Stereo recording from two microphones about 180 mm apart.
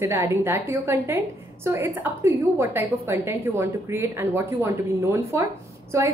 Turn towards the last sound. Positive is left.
turn(degrees=-15)  # may be behind; listen again after turning